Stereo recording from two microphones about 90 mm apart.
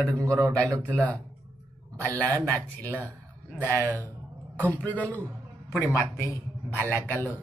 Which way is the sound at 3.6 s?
30° right (ahead or behind).